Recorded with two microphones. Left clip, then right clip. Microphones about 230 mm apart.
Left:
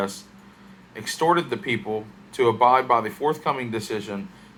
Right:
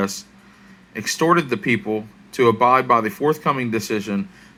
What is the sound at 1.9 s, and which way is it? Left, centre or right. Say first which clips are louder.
Speech: right 4 dB; centre.